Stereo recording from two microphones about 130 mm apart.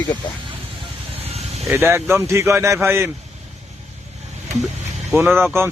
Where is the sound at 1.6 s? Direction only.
20° right (ahead or behind).